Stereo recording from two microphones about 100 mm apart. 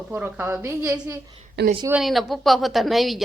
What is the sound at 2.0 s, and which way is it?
Speech, centre (ahead or behind).